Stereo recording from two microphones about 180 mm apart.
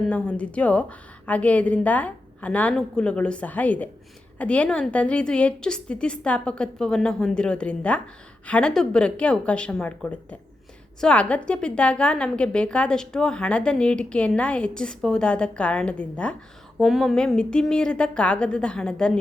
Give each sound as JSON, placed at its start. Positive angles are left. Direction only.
{"t": 0.0, "sound": "a woman's voice", "side_deg": 5}